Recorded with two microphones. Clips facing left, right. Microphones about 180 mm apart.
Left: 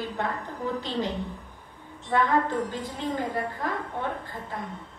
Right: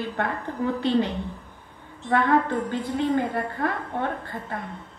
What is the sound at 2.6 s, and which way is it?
A woman's voice, 60° right (ahead or behind).